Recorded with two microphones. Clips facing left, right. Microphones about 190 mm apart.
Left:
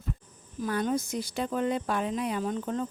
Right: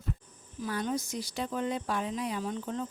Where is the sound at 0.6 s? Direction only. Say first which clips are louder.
Left 4 dB; 50° left (ahead or behind).